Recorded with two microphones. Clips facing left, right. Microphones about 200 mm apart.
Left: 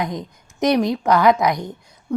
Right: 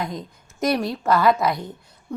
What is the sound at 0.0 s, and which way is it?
A woman's voice, 20° left (ahead or behind).